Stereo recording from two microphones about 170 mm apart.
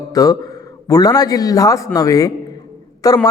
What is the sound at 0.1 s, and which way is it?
A man's voice, 20° left (ahead or behind).